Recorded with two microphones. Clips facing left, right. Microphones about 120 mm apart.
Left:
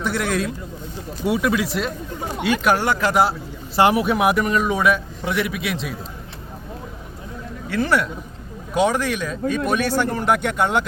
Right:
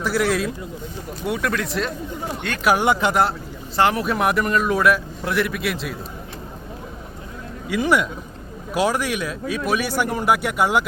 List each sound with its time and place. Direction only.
0.0 s a man's voice: centre (ahead or behind)
2.7 s speech: 15° right (ahead or behind)
3.1 s a man's voice: centre (ahead or behind)
3.8 s speech: 15° left (ahead or behind)
4.0 s a man's voice: centre (ahead or behind)
7.7 s speech: 15° right (ahead or behind)